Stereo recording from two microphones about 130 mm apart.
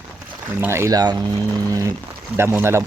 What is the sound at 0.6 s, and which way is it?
Speech, 20° right (ahead or behind).